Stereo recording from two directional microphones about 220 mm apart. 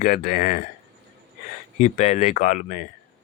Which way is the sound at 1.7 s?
30° left (ahead or behind).